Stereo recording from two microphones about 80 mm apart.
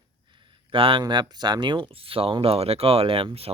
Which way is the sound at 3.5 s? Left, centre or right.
Right.